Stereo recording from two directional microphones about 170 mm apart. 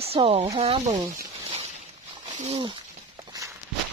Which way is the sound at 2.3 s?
35° right (ahead or behind).